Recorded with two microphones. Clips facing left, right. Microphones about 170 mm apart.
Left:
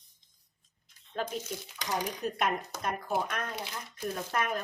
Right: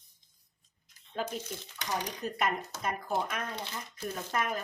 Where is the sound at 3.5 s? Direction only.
10° left (ahead or behind).